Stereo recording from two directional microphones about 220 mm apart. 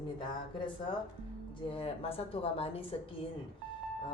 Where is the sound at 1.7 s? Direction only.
25° left (ahead or behind).